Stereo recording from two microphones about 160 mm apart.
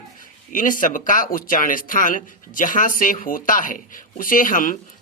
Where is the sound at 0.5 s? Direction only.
55° left (ahead or behind).